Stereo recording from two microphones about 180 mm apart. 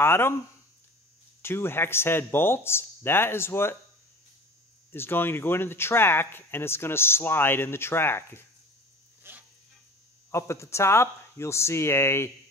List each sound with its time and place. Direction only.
0.0 s speech: 15° left (ahead or behind)
1.4 s speech: 15° left (ahead or behind)
4.9 s speech: 10° left (ahead or behind)
9.3 s a sound: 10° right (ahead or behind)
10.3 s speech: 15° left (ahead or behind)